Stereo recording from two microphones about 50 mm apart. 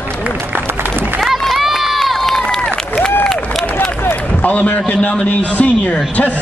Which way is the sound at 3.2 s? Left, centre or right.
Centre.